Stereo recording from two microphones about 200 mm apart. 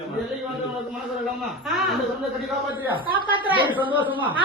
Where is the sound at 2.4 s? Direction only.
5° right (ahead or behind).